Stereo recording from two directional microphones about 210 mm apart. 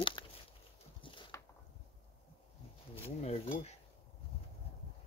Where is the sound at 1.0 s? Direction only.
25° left (ahead or behind).